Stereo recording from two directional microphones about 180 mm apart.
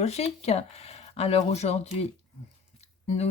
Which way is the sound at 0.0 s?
35° left (ahead or behind).